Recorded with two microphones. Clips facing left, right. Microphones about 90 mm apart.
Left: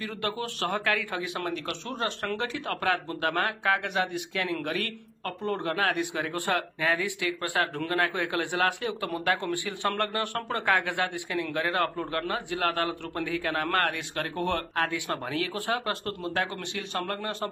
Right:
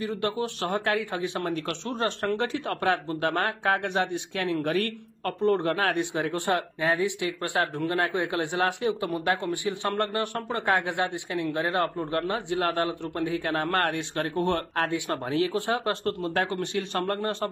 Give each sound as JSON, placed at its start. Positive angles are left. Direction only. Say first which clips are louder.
{"t": 0.0, "sound": "a man's voice", "louder": "right 4 dB", "side_deg": -20}